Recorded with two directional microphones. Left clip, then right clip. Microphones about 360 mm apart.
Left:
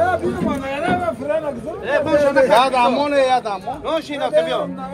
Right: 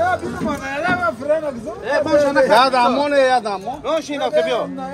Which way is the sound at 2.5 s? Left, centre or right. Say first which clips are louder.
Right 1 dB; right.